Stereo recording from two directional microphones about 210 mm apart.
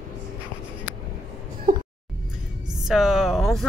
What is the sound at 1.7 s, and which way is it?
Music, 40° right (ahead or behind).